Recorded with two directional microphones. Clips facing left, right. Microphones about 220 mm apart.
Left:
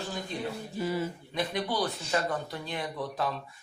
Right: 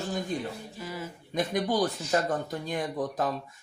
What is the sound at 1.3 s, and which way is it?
Speech, 45° right (ahead or behind).